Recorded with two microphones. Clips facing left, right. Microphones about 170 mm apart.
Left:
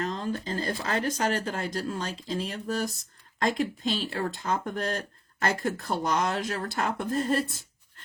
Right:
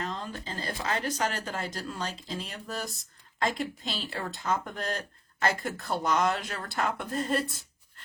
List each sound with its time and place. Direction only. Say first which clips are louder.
0.0 s speech: left 5 dB; 45° left (ahead or behind)